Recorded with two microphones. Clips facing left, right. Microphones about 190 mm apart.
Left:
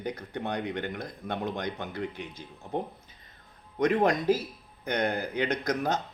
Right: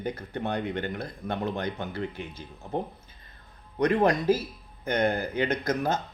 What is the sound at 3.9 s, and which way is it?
Speech, centre (ahead or behind).